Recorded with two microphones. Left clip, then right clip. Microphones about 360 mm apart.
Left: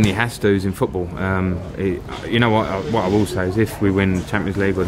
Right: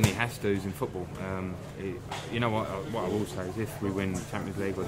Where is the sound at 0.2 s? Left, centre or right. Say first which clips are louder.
Left 11 dB; left.